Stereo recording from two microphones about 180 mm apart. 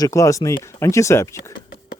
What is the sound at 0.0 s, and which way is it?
Speech, 15° left (ahead or behind).